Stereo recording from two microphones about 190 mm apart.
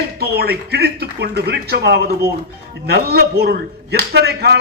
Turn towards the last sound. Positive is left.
turn(degrees=-60)  # may be behind; listen again after turning